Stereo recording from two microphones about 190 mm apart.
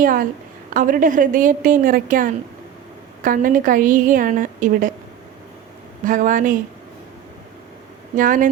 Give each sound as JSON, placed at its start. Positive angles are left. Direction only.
{"t": 0.0, "sound": "a woman's voice", "side_deg": -45}
{"t": 6.1, "sound": "a woman's voice", "side_deg": -45}
{"t": 8.1, "sound": "a woman's voice", "side_deg": -45}